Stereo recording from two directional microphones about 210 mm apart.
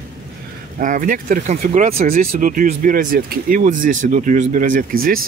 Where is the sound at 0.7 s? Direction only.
40° right (ahead or behind).